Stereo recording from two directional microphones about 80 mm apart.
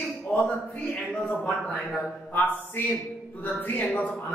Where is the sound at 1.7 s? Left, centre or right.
Centre.